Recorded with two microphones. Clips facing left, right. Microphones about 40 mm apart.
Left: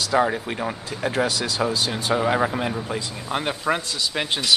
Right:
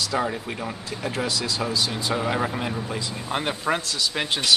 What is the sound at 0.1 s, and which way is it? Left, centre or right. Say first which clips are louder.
Speech: left 5 dB; left.